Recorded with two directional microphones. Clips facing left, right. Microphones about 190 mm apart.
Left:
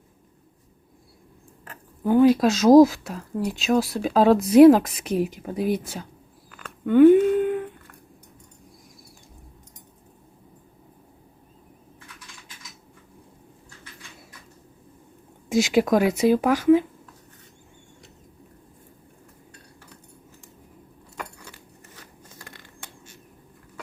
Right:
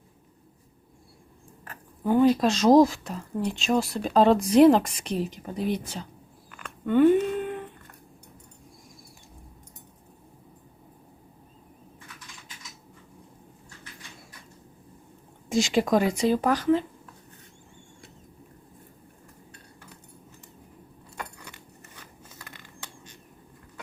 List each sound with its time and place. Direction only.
2.0 s speech: centre (ahead or behind)
6.5 s a sound: 5° left (ahead or behind)
15.4 s speech: 5° left (ahead or behind)